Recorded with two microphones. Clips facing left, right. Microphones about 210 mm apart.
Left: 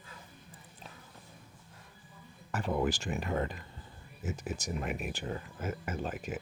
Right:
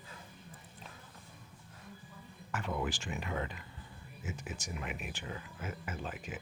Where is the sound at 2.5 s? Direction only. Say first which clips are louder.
Left 5 dB; 35° left (ahead or behind).